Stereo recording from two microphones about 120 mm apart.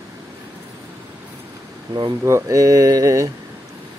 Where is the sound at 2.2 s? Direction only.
25° right (ahead or behind).